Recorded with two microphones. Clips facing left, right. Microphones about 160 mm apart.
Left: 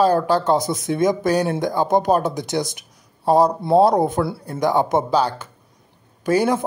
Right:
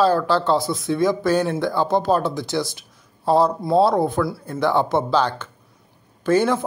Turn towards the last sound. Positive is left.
turn(degrees=15)  # may be behind; listen again after turning